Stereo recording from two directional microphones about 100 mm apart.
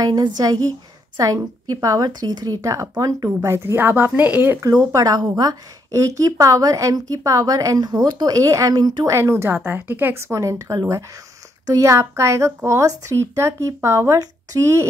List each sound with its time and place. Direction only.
0.0 s a woman's voice: 40° right (ahead or behind); by 4.6 s 20° right (ahead or behind)
4.6 s a woman's voice: 35° right (ahead or behind)
9.1 s a child's voice: 25° right (ahead or behind)